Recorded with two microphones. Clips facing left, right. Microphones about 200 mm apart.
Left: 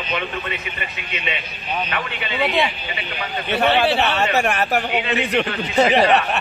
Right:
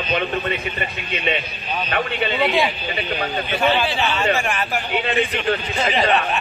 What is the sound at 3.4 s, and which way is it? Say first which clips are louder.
A man's voice: left 4 dB; 65° left (ahead or behind).